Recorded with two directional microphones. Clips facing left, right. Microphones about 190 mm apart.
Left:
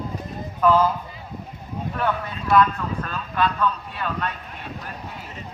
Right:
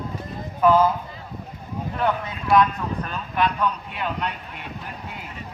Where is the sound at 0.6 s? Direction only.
15° right (ahead or behind).